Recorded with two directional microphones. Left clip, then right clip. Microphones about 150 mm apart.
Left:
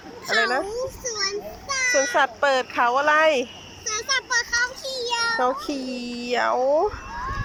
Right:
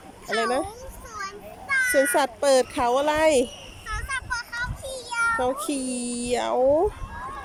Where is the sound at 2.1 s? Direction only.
35° right (ahead or behind).